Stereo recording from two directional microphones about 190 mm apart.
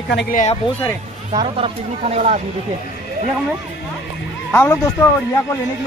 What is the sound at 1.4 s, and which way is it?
Speech, 30° right (ahead or behind).